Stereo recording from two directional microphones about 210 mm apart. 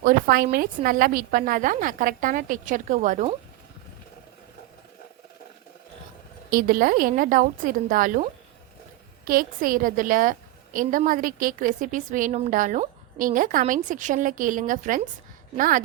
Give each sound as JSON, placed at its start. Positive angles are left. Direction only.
{"t": 0.0, "sound": "a woman's voice", "side_deg": -40}
{"t": 6.5, "sound": "a woman's voice", "side_deg": -40}